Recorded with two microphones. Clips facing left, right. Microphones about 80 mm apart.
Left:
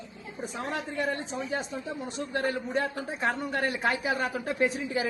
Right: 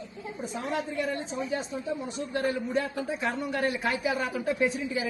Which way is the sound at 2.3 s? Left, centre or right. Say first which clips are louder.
Right 1 dB; left.